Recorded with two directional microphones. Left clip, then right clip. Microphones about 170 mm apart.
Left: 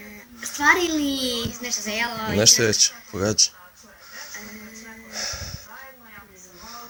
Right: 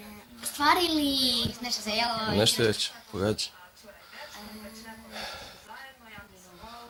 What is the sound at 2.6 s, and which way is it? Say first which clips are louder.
Speech: left 7 dB; 5° left (ahead or behind).